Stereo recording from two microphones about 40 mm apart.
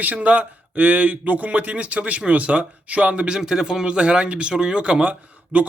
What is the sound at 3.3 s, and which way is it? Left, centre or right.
Speech, centre.